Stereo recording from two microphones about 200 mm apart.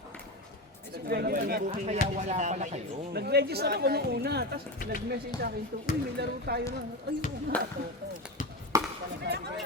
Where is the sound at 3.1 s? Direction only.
55° right (ahead or behind).